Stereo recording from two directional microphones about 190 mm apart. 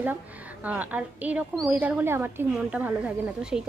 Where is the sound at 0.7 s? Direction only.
10° right (ahead or behind).